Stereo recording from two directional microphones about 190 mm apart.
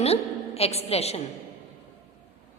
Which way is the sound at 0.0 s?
30° left (ahead or behind).